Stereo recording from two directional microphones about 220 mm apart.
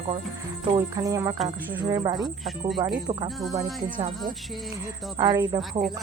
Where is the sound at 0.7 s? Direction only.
15° right (ahead or behind).